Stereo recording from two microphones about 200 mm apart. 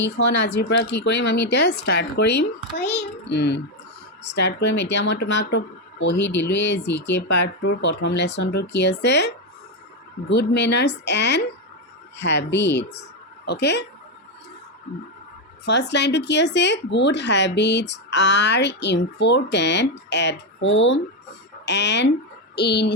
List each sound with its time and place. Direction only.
0.0 s speech: 65° left (ahead or behind)
13.0 s a sound: 55° left (ahead or behind)
15.6 s speech: 60° left (ahead or behind)